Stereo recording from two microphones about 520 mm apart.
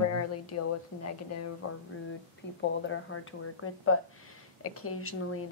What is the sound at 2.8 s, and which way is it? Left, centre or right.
Speech, left.